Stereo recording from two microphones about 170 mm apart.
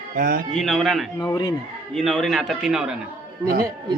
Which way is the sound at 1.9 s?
Centre (ahead or behind).